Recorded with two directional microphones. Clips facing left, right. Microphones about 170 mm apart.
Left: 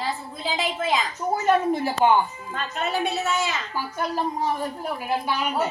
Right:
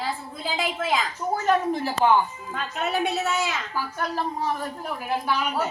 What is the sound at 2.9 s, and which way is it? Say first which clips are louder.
Speech: even; centre (ahead or behind).